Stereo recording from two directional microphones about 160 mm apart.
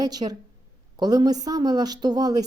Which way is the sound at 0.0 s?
25° right (ahead or behind).